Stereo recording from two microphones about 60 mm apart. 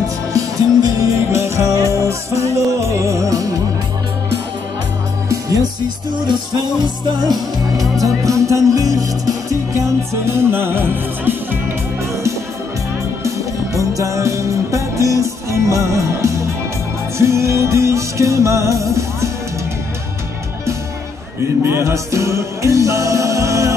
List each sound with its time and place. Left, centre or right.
0.3 s music: right
1.3 s music: right
7.7 s music: centre
8.0 s music: right
10.2 s music: right
13.7 s music: right
21.6 s music: right